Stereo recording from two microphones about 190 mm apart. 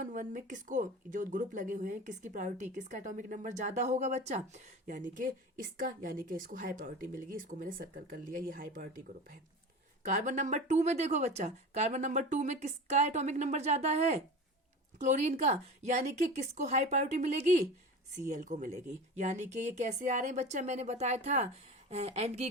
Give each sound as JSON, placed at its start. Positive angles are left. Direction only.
{"t": 0.0, "sound": "speech", "side_deg": -45}
{"t": 10.0, "sound": "speech", "side_deg": -40}